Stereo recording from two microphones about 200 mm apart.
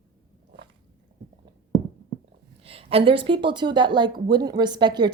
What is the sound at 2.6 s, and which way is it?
A woman's voice, 30° right (ahead or behind).